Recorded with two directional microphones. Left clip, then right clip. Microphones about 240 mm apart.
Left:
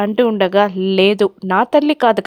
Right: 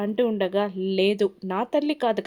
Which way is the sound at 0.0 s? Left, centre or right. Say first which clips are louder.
Left 9 dB; left.